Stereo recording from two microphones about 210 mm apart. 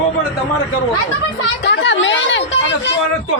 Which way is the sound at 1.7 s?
60° left (ahead or behind).